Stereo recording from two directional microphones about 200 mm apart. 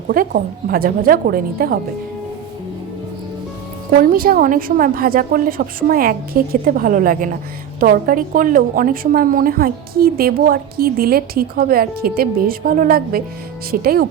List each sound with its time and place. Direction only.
0.1 s a woman's voice: 45° right (ahead or behind)
3.9 s a woman's voice: 45° right (ahead or behind)